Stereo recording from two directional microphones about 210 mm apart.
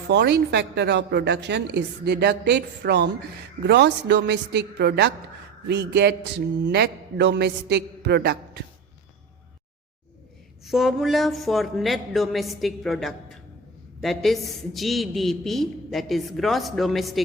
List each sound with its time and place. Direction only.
0.1 s a woman's voice: 50° right (ahead or behind)
10.7 s a man's voice: centre (ahead or behind)